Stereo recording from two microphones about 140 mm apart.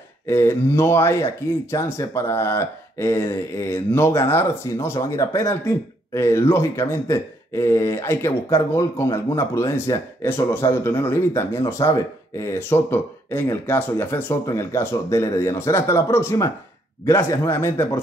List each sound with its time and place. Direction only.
0.3 s speech: 20° left (ahead or behind)